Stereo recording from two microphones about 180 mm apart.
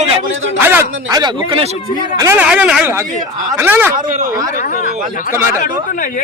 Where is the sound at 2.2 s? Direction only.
10° right (ahead or behind).